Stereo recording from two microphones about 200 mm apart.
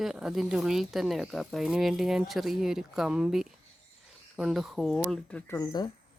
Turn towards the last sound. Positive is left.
turn(degrees=20)  # may be behind; listen again after turning